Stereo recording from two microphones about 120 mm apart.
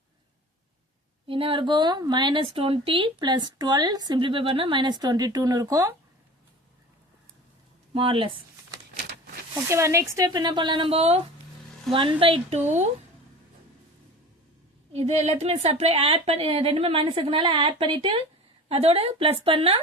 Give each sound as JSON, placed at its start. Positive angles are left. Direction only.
{"t": 1.3, "sound": "speech", "side_deg": -50}
{"t": 7.9, "sound": "speech", "side_deg": -50}
{"t": 9.6, "sound": "speech", "side_deg": -25}
{"t": 11.9, "sound": "speech", "side_deg": -45}
{"t": 14.9, "sound": "a woman's voice", "side_deg": -65}
{"t": 18.7, "sound": "a woman's voice", "side_deg": -60}